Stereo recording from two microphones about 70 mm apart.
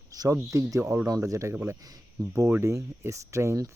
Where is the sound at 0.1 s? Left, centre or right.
Right.